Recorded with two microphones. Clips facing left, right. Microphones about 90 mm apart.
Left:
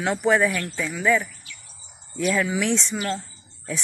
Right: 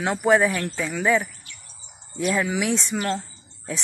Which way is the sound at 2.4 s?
20° right (ahead or behind).